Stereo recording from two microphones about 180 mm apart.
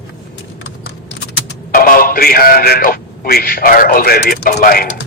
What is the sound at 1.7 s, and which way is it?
A man's voice, 55° left (ahead or behind).